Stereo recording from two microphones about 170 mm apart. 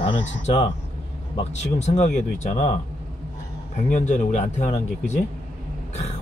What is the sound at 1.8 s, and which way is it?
Speech, 40° left (ahead or behind).